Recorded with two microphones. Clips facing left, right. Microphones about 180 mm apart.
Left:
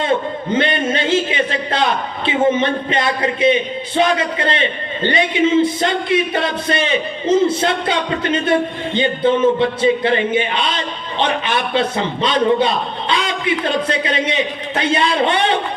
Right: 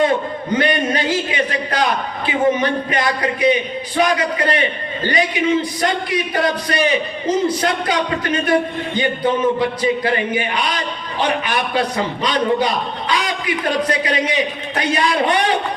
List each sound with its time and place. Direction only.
0.0 s a man's voice: 25° left (ahead or behind)